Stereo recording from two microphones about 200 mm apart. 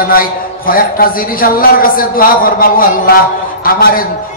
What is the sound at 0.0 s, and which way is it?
A man's voice, 45° left (ahead or behind).